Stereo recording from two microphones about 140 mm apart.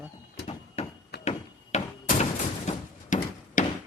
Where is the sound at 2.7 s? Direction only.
65° left (ahead or behind).